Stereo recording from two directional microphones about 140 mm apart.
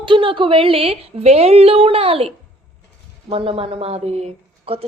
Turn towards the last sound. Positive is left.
turn(degrees=-45)  # may be behind; listen again after turning